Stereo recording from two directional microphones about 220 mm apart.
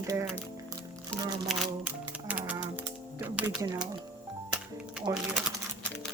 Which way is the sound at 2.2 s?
5° right (ahead or behind).